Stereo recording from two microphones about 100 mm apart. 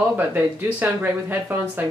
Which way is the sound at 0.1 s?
20° right (ahead or behind).